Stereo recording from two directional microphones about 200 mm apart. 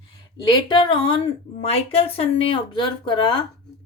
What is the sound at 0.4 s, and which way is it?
Speech, 20° left (ahead or behind).